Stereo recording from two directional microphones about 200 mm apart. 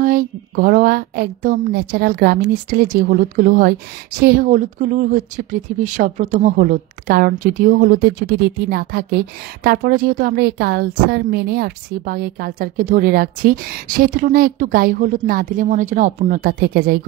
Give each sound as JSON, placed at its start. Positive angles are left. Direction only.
{"t": 0.0, "sound": "speech", "side_deg": -45}